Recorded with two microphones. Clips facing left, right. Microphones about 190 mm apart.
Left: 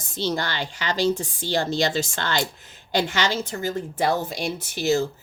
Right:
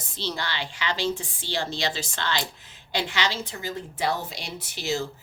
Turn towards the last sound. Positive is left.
turn(degrees=45)  # may be behind; listen again after turning